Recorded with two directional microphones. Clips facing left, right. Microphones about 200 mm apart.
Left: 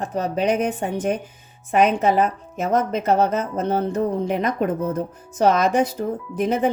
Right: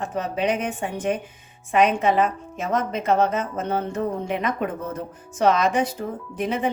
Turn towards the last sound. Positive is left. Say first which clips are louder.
# left 4 dB
turn(degrees=45)  # may be behind; listen again after turning